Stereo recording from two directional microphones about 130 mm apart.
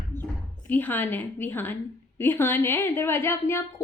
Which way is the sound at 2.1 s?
15° left (ahead or behind).